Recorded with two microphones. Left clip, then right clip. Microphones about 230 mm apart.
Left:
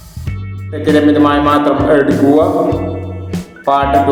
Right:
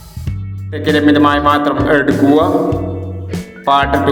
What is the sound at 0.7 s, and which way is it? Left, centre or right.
Music, right.